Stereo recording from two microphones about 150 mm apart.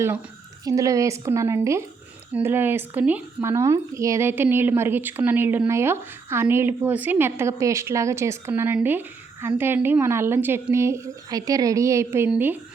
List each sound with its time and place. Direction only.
0.6 s a woman's voice: 20° right (ahead or behind)